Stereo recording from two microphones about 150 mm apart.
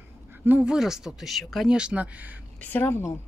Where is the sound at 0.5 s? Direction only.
5° right (ahead or behind).